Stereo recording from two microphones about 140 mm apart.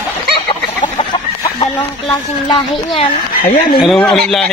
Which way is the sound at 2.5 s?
35° left (ahead or behind).